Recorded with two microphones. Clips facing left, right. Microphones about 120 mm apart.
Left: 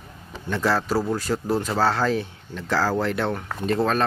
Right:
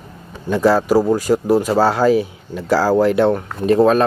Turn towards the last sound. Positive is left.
turn(degrees=-10)  # may be behind; listen again after turning